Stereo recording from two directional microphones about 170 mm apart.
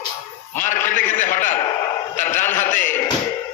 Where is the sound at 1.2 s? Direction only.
50° left (ahead or behind).